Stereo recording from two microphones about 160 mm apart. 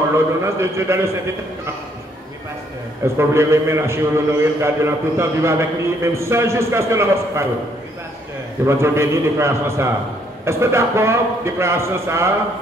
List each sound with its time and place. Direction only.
0.1 s a man's voice: 15° right (ahead or behind)
3.2 s a man's voice: 15° right (ahead or behind)
8.6 s a man's voice: 15° right (ahead or behind)